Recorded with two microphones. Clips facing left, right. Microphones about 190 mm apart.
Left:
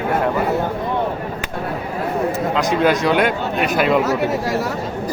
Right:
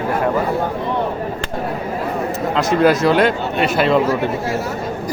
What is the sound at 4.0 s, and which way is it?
Speech, 75° left (ahead or behind).